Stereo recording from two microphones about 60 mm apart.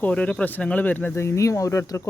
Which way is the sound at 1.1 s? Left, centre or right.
Left.